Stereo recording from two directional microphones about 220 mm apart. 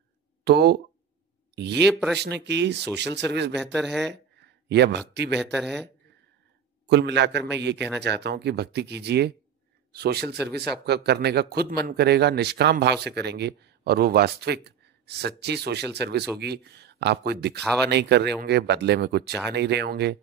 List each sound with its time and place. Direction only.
0.5 s speech: 50° right (ahead or behind)
2.0 s speech: 5° left (ahead or behind)
2.2 s speech: 50° right (ahead or behind)
3.5 s speech: centre (ahead or behind)
4.1 s speech: 50° right (ahead or behind)
5.4 s speech: centre (ahead or behind)
6.9 s speech: 50° right (ahead or behind)